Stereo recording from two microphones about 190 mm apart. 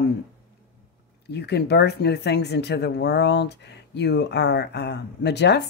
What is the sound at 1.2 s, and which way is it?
Speech, 60° left (ahead or behind).